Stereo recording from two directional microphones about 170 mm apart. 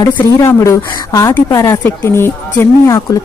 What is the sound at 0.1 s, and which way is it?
Speech, 15° left (ahead or behind).